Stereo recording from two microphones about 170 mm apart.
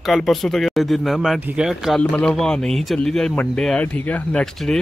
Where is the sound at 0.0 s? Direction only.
Centre (ahead or behind).